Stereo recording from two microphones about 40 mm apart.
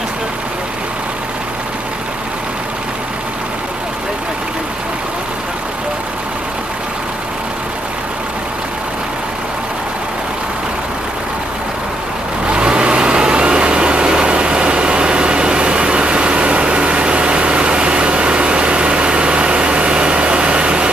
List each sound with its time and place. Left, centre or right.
12.4 s vehicle: right